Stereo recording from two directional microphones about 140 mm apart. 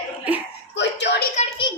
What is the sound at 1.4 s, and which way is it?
Speech, 55° left (ahead or behind).